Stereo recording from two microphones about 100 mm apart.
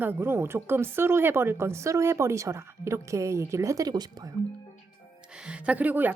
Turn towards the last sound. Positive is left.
turn(degrees=-20)  # may be behind; listen again after turning